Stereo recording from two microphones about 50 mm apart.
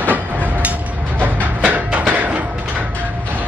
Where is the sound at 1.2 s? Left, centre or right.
Right.